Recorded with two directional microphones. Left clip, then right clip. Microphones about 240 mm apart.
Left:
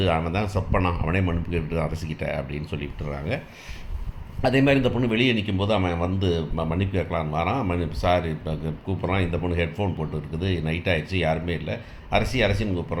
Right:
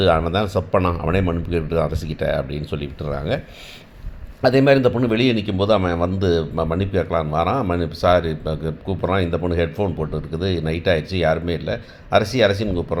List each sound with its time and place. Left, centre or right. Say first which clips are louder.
0.0 s speech: right 7 dB; right
4.4 s speech: right 6 dB; right